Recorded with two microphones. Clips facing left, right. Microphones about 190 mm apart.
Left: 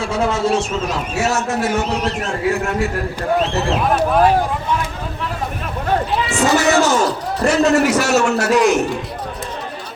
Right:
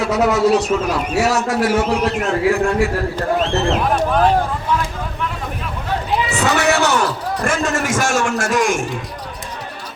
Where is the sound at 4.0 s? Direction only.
5° left (ahead or behind).